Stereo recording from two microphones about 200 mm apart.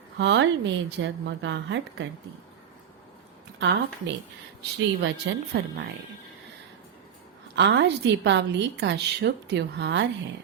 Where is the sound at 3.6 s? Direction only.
60° right (ahead or behind).